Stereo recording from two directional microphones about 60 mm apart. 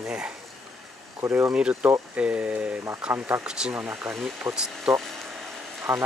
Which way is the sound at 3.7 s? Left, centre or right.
Right.